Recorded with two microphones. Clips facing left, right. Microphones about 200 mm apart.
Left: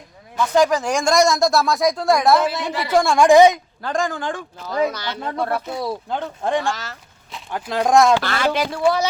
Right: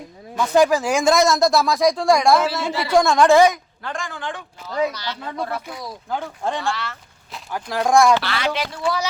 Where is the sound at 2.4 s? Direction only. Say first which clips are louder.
Left 1 dB; 15° left (ahead or behind).